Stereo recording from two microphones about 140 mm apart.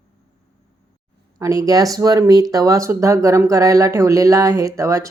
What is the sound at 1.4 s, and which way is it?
Speech, 25° right (ahead or behind).